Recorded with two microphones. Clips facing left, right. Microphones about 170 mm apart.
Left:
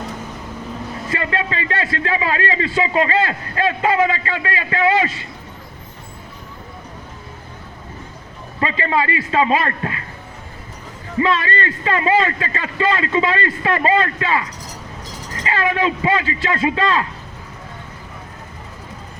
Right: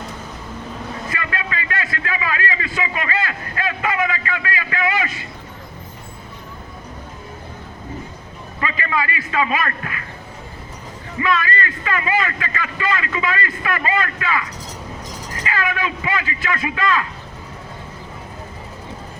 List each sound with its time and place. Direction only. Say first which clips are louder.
1.1 s a man's voice: left 7 dB; 30° left (ahead or behind)
8.6 s a man's voice: left 4 dB; 30° left (ahead or behind)
11.2 s a man's voice: left 2 dB; 30° left (ahead or behind)